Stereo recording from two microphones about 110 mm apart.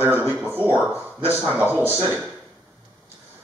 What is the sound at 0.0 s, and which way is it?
Speech, 20° right (ahead or behind).